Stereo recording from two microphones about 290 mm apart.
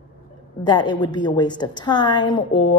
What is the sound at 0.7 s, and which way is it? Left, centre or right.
A woman's voice, centre.